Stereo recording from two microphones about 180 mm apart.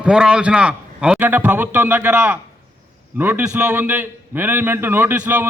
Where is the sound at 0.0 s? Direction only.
5° right (ahead or behind).